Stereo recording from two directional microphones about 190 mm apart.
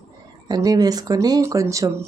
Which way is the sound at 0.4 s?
20° right (ahead or behind).